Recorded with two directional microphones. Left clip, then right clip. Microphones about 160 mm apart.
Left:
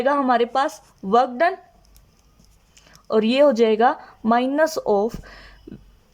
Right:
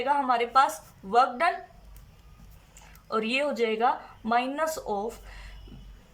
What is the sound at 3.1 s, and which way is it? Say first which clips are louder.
Speech: left 11 dB; 55° left (ahead or behind).